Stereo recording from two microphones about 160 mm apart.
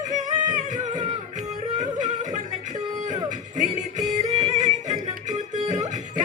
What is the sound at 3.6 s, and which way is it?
Music, 50° right (ahead or behind).